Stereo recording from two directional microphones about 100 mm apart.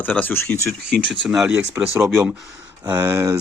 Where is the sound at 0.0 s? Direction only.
15° left (ahead or behind).